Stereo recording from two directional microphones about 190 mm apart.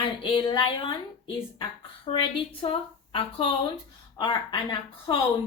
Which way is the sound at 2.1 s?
30° left (ahead or behind).